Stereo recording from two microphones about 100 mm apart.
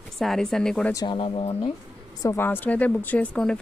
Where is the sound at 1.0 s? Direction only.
60° left (ahead or behind); by 1.7 s 85° left.